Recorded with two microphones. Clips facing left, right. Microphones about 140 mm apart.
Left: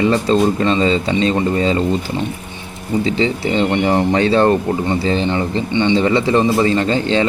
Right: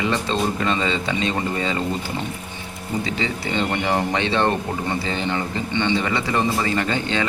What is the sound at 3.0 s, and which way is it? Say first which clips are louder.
A man's voice: left 8 dB; 30° left (ahead or behind).